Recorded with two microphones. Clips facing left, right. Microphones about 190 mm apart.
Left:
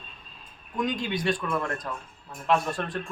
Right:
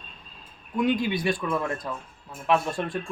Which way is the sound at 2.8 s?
15° right (ahead or behind).